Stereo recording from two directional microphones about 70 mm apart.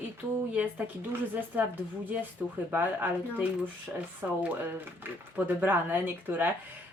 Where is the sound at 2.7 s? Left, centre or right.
Right.